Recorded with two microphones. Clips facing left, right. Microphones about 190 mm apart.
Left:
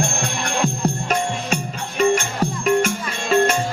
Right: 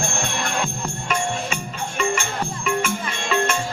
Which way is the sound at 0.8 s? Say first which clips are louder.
Left 4 dB; 40° left (ahead or behind).